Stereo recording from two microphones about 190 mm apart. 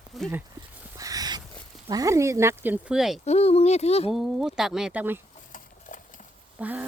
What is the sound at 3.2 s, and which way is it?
Speech, 35° left (ahead or behind).